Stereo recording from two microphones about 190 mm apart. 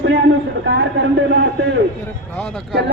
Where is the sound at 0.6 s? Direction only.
65° right (ahead or behind).